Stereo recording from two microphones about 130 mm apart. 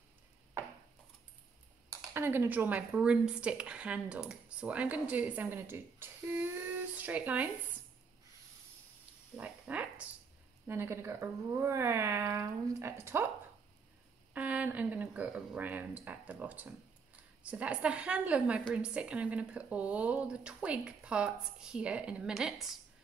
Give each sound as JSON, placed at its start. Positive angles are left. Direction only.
{"t": 1.9, "sound": "speech", "side_deg": -20}
{"t": 9.4, "sound": "a sound", "side_deg": -10}
{"t": 10.7, "sound": "speech", "side_deg": -20}
{"t": 14.3, "sound": "speech", "side_deg": -10}